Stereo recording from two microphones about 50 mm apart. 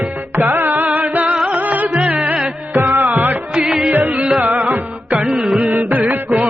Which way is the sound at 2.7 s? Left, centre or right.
Right.